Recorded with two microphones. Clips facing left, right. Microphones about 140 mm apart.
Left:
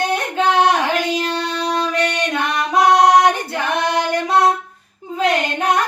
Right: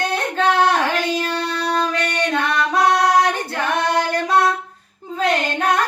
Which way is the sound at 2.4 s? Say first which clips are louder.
Left 3 dB; 15° left (ahead or behind).